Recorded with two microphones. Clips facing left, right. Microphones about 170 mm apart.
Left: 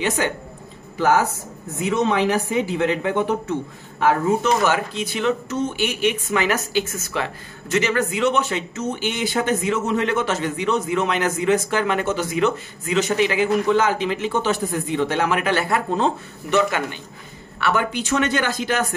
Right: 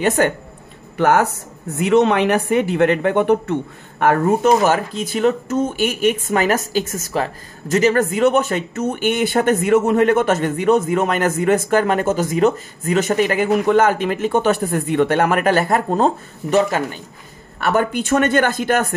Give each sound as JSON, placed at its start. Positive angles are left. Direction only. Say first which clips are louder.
{"t": 0.0, "sound": "speech", "louder": "right 6 dB", "side_deg": -50}
{"t": 0.9, "sound": "a woman's voice", "louder": "right 3 dB", "side_deg": -60}